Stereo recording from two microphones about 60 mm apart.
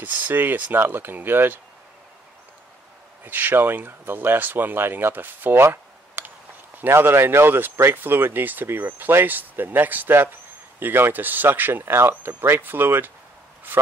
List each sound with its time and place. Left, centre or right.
0.0 s speech: right
3.3 s speech: right